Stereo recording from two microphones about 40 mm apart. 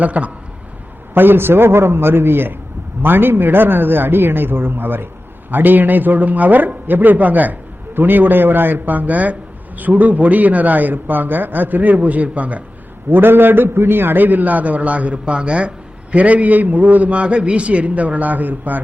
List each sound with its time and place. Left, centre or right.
0.0 s a man's voice: right
1.1 s a man's voice: right
5.5 s a man's voice: right
13.1 s a man's voice: right
15.2 s speech: right
16.1 s a man's voice: right